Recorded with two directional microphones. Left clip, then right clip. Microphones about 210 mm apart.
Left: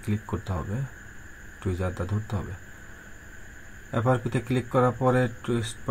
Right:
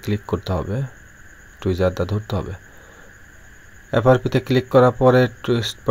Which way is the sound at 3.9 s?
40° right (ahead or behind).